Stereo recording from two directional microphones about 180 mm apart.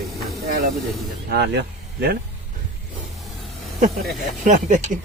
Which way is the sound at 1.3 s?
65° right (ahead or behind).